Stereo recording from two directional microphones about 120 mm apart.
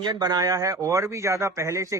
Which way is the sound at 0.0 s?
35° right (ahead or behind).